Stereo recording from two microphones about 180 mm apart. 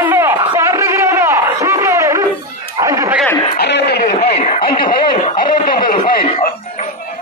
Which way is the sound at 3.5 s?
65° left (ahead or behind).